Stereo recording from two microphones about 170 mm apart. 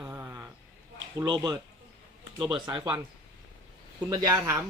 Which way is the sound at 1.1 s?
25° right (ahead or behind).